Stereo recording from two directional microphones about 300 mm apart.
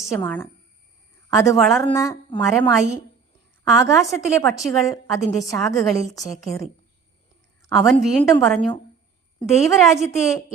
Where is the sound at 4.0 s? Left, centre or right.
Centre.